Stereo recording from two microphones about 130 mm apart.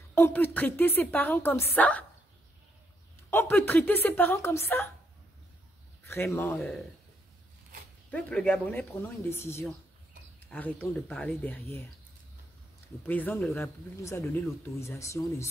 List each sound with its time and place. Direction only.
0.1 s a woman's voice: 15° left (ahead or behind)
3.3 s a woman's voice: 20° left (ahead or behind)
6.0 s speech: 20° left (ahead or behind)
6.5 s a man's voice: centre (ahead or behind)
8.1 s a woman's voice: 10° left (ahead or behind)
13.0 s a woman's voice: 15° left (ahead or behind)